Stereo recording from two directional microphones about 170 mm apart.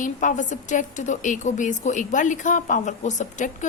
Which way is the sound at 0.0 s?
50° left (ahead or behind).